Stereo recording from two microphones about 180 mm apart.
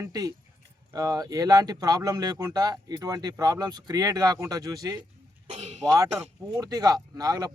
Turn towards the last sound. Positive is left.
turn(degrees=-20)  # may be behind; listen again after turning